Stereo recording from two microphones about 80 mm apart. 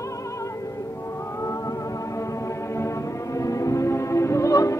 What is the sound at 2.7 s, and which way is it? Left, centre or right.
Music, left.